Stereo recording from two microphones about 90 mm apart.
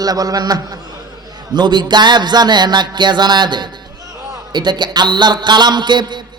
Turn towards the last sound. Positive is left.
turn(degrees=-55)  # may be behind; listen again after turning